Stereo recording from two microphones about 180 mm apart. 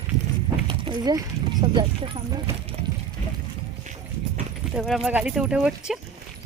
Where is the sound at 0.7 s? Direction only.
25° right (ahead or behind).